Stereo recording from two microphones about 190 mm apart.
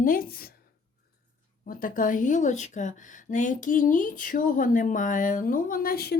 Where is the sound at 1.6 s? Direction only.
45° left (ahead or behind).